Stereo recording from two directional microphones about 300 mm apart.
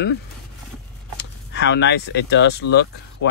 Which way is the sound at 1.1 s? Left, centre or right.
Left.